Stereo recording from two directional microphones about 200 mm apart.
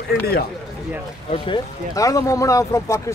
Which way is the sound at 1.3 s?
25° left (ahead or behind).